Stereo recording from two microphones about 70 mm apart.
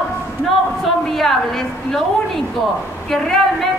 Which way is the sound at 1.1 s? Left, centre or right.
Centre.